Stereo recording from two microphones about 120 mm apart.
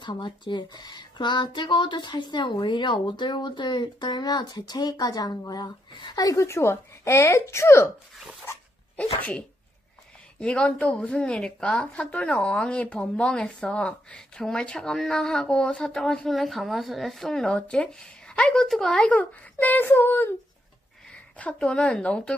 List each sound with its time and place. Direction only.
0.0 s speech: 40° left (ahead or behind); by 7.9 s 25° left (ahead or behind)
9.0 s a woman's voice: 10° left (ahead or behind)
10.4 s a woman's voice: 10° left (ahead or behind)